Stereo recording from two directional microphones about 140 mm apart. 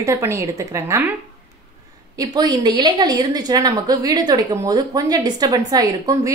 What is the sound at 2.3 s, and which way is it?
A woman's voice, 30° right (ahead or behind).